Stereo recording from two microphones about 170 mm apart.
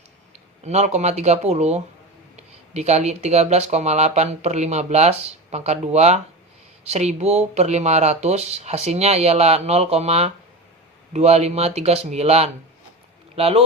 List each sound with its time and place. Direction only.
0.6 s speech: 40° right (ahead or behind)